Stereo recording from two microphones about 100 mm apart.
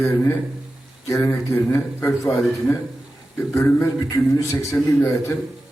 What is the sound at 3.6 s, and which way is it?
A man's voice, 25° left (ahead or behind).